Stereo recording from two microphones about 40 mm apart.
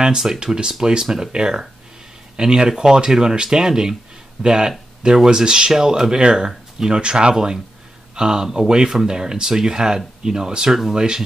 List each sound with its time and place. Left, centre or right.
0.0 s speech: centre